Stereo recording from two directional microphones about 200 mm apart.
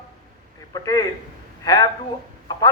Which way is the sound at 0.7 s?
15° left (ahead or behind).